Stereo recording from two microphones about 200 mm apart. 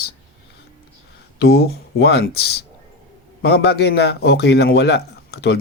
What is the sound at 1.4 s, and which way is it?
Speech, 55° left (ahead or behind).